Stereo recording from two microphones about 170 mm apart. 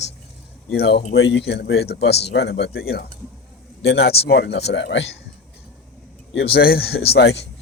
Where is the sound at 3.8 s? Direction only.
75° left (ahead or behind).